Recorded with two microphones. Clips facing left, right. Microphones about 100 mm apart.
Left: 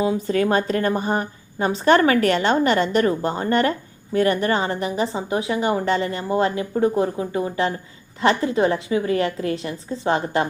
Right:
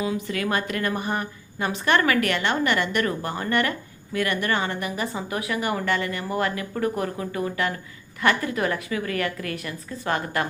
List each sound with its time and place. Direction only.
0.0 s a woman's voice: 35° left (ahead or behind)